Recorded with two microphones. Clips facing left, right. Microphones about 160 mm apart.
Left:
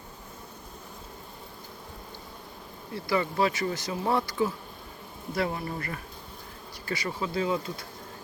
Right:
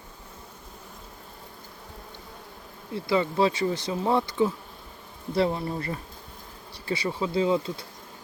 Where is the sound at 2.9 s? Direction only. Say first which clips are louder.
Right 3 dB; 20° right (ahead or behind).